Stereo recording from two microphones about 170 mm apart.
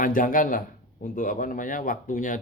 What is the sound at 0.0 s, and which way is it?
Speech, 55° left (ahead or behind).